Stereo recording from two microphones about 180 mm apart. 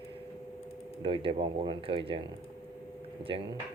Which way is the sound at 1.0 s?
30° right (ahead or behind).